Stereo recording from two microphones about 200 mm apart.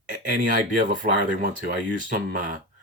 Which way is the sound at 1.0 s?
40° right (ahead or behind).